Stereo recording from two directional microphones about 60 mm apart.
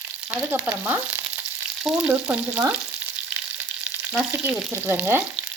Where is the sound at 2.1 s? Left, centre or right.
Right.